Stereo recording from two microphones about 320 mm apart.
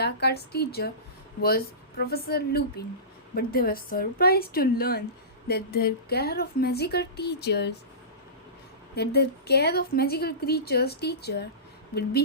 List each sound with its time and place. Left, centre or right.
0.0 s a woman's voice: left
9.0 s a woman's voice: left